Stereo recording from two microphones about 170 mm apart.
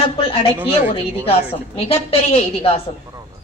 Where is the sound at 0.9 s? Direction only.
35° left (ahead or behind).